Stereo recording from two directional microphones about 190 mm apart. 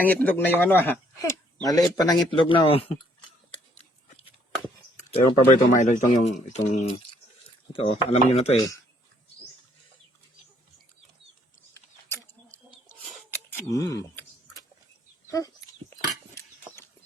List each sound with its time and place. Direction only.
0.0 s a man's voice: 10° left (ahead or behind); by 2.8 s 30° left (ahead or behind)
4.9 s speech: 40° left (ahead or behind)
13.5 s a sound: 15° left (ahead or behind)